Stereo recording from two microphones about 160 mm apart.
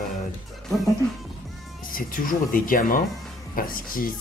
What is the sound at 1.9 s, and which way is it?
Speech, 60° left (ahead or behind).